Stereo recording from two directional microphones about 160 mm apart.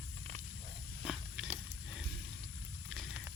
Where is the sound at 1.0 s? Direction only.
5° right (ahead or behind).